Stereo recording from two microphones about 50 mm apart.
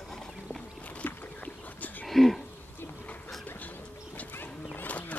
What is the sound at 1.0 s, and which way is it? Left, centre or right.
Boat, left.